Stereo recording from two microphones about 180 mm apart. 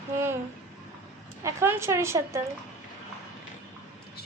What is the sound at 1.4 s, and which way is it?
Speech, 15° right (ahead or behind).